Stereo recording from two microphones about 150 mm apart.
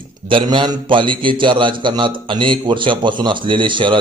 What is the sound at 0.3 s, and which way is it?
Speech, 35° right (ahead or behind).